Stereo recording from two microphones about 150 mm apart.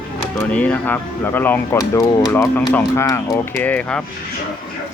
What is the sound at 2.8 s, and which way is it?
Speech, 20° left (ahead or behind).